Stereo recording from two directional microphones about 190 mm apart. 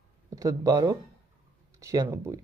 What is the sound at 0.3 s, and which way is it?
Speech, 20° right (ahead or behind).